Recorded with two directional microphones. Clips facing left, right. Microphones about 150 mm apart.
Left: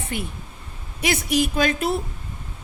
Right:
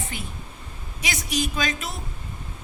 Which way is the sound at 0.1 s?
60° left (ahead or behind).